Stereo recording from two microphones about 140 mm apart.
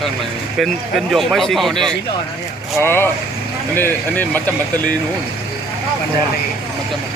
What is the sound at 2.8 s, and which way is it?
Speech, 15° left (ahead or behind).